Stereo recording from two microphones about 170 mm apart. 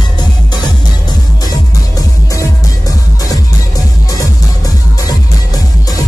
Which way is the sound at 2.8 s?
20° left (ahead or behind).